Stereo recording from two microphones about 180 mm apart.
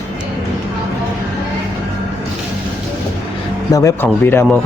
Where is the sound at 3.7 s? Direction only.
20° left (ahead or behind).